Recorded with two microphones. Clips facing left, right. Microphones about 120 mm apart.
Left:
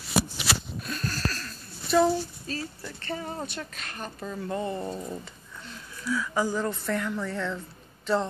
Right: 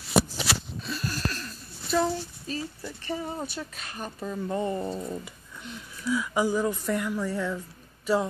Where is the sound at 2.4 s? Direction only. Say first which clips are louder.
Right 1 dB; 15° right (ahead or behind).